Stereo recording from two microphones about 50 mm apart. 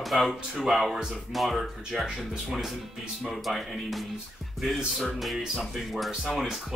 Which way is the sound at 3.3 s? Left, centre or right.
Centre.